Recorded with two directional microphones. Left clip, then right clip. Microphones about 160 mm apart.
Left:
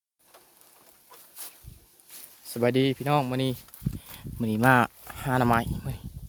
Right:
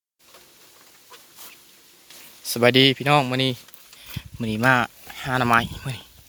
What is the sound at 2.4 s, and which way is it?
Speech, 5° right (ahead or behind).